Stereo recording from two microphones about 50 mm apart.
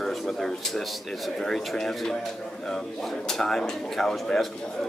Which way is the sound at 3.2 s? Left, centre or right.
Centre.